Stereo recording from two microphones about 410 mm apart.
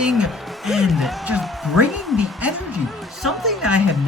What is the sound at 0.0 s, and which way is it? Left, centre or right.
A man's voice, centre.